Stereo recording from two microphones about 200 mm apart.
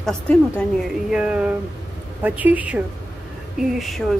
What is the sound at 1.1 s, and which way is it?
A woman's voice, 5° right (ahead or behind).